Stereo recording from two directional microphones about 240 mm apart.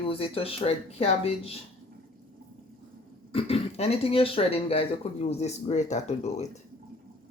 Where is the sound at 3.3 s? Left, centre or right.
Left.